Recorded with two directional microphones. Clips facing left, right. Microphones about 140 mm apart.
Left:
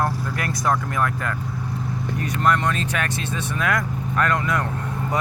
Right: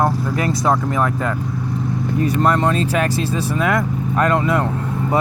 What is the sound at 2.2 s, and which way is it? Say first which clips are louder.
Speech: right 4 dB; 30° right (ahead or behind).